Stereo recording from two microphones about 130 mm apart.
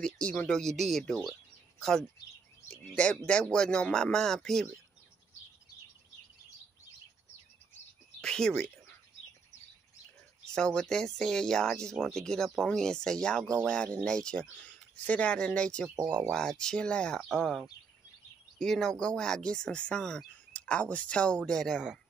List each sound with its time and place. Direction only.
0.0 s speech: 10° left (ahead or behind)
3.3 s speech: 5° left (ahead or behind)
8.2 s speech: 5° left (ahead or behind)
10.5 s speech: 5° left (ahead or behind)